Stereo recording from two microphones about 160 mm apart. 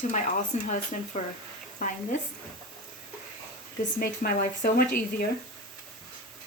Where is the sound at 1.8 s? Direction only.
60° left (ahead or behind).